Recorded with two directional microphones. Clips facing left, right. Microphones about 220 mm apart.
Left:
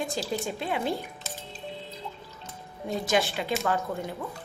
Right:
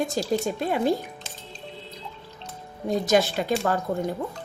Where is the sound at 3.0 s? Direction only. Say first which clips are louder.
Right 4 dB; 40° right (ahead or behind).